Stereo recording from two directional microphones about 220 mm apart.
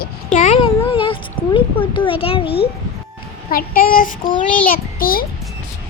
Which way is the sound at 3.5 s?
40° left (ahead or behind).